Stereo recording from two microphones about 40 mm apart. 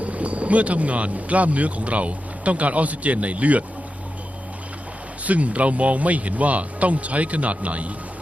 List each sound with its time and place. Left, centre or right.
0.0 s speech: right
5.2 s speech: right